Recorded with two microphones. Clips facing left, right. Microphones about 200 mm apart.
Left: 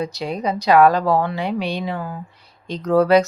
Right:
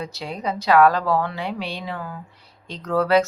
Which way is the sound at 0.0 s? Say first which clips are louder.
Left 5 dB; 15° left (ahead or behind).